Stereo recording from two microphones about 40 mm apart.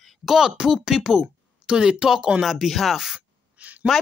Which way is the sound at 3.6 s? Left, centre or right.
Right.